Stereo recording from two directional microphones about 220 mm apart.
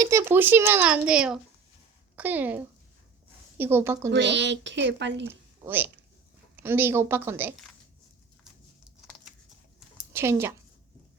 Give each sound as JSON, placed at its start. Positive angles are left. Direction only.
{"t": 0.0, "sound": "speech", "side_deg": -10}
{"t": 4.1, "sound": "speech", "side_deg": -55}
{"t": 5.6, "sound": "speech", "side_deg": -10}
{"t": 10.1, "sound": "a woman's voice", "side_deg": -10}